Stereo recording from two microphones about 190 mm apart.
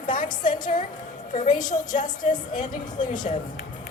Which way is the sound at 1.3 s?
40° left (ahead or behind).